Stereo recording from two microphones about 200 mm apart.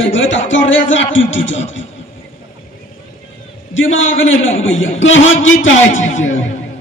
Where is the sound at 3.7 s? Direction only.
75° left (ahead or behind).